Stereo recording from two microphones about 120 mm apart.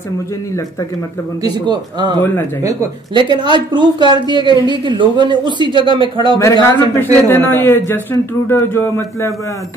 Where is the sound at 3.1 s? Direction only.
40° right (ahead or behind).